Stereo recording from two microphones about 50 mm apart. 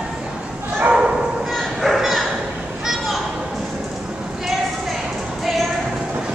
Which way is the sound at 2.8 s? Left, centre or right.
Centre.